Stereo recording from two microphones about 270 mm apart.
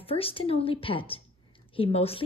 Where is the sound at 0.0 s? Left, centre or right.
Left.